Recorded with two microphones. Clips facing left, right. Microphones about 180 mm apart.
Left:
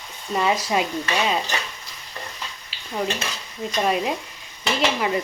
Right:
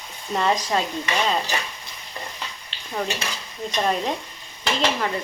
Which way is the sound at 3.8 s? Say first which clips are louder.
Left 1 dB; 5° left (ahead or behind).